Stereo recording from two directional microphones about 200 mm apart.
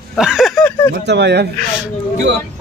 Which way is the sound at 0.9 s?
60° right (ahead or behind).